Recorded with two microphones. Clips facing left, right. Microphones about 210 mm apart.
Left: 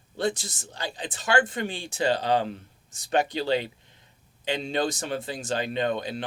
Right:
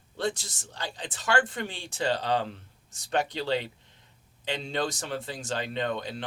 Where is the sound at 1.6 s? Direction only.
15° left (ahead or behind).